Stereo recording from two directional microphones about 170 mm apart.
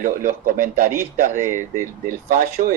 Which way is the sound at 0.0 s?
50° right (ahead or behind).